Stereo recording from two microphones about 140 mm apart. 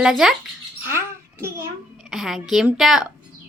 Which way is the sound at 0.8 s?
20° right (ahead or behind).